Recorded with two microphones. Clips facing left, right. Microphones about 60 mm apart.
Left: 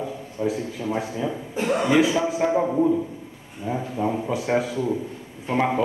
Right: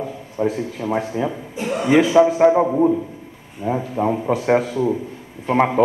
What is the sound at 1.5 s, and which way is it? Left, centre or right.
Speech, left.